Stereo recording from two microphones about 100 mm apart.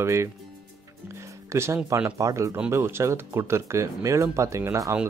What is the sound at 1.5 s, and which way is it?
Speech, 30° right (ahead or behind).